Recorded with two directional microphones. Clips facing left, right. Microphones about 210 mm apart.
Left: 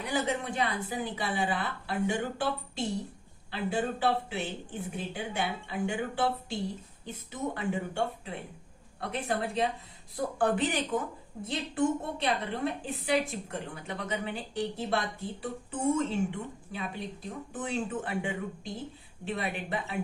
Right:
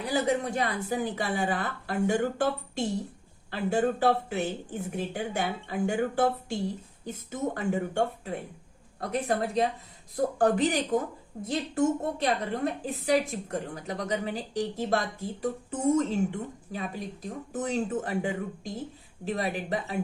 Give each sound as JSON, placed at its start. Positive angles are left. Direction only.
{"t": 0.0, "sound": "a woman's voice", "side_deg": -40}